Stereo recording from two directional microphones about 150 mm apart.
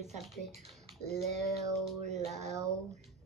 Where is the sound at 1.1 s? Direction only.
50° right (ahead or behind).